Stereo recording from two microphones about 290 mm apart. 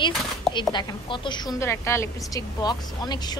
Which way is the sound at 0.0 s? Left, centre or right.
Centre.